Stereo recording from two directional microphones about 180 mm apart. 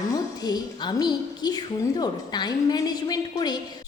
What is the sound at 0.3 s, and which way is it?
A woman's voice, 20° left (ahead or behind).